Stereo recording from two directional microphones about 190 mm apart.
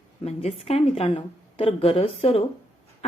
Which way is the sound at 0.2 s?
30° left (ahead or behind).